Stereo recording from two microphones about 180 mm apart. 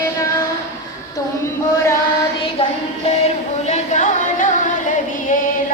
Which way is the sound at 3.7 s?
45° left (ahead or behind).